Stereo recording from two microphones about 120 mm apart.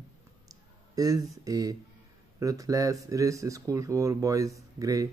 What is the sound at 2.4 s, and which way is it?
Speech, 30° right (ahead or behind).